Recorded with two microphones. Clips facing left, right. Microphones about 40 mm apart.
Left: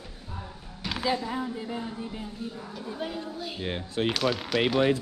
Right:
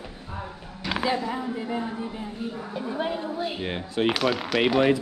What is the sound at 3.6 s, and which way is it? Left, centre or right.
Speech, right.